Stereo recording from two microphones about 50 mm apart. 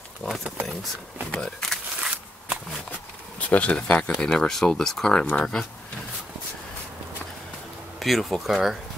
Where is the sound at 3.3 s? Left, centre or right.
Left; by 5.2 s centre.